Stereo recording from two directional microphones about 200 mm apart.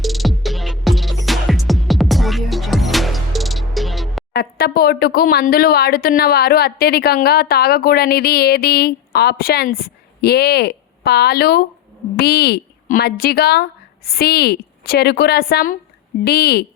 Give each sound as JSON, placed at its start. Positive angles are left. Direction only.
{"t": 0.0, "sound": "music", "side_deg": 0}
{"t": 4.3, "sound": "speech", "side_deg": 50}